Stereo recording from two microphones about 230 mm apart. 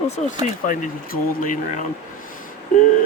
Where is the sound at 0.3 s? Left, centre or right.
Left.